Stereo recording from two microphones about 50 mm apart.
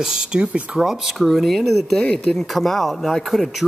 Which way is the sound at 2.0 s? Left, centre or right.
Centre.